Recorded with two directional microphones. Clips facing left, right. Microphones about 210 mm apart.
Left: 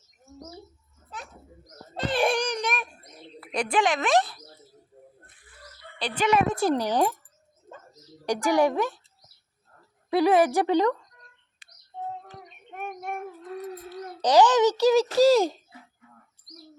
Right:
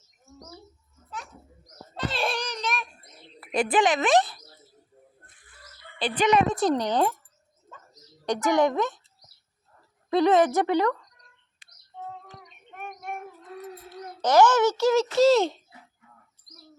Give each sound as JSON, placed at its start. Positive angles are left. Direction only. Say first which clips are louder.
{"t": 2.1, "sound": "a sound", "louder": "left 8 dB", "side_deg": 15}
{"t": 3.4, "sound": "speech", "louder": "right 2 dB", "side_deg": -5}
{"t": 6.0, "sound": "a woman's voice", "louder": "right 2 dB", "side_deg": 0}
{"t": 8.4, "sound": "speech", "louder": "even", "side_deg": 10}
{"t": 10.1, "sound": "speech", "louder": "even", "side_deg": 10}
{"t": 13.9, "sound": "a child's voice", "louder": "left 1 dB", "side_deg": 15}